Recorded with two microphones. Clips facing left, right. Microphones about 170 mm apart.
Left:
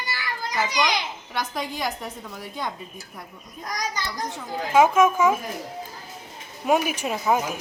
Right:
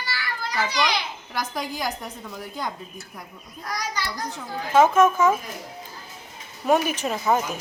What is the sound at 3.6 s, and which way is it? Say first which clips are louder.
A child's voice: even; 20° left (ahead or behind).